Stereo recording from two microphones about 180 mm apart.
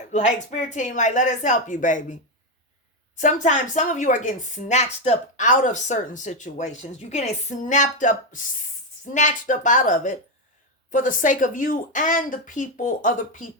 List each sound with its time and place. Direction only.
0.1 s a woman's voice: 40° left (ahead or behind)
3.2 s a woman's voice: 45° left (ahead or behind)